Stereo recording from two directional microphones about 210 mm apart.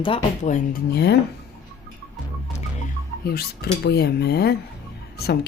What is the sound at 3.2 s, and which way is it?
Speech, 50° left (ahead or behind).